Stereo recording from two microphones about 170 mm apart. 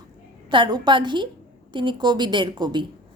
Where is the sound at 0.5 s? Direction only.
30° right (ahead or behind).